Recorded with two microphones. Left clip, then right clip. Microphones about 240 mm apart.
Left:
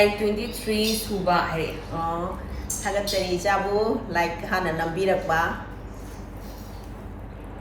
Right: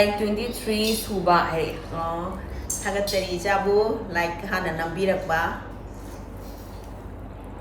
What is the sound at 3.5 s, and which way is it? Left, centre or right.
A woman's voice, centre.